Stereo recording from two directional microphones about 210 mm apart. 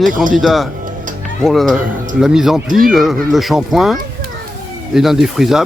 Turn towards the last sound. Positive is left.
turn(degrees=0)  # may be behind; listen again after turning